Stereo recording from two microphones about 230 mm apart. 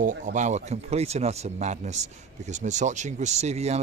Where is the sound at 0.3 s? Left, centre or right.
Right.